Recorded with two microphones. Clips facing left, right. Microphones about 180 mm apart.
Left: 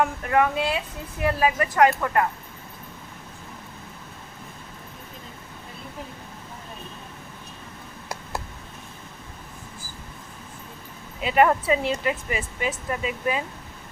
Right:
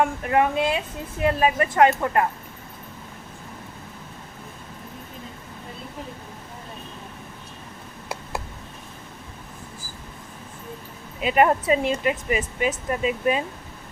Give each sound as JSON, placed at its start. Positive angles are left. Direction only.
{"t": 0.0, "sound": "speech", "side_deg": -25}
{"t": 11.2, "sound": "speech", "side_deg": -20}